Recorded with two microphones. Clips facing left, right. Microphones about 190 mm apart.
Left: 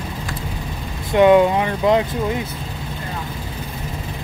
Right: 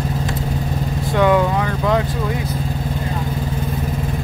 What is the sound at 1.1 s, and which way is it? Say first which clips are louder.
Speech: left 4 dB; 20° left (ahead or behind).